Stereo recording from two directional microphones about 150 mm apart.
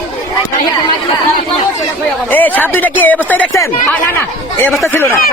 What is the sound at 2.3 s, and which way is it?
A woman's voice, 10° left (ahead or behind).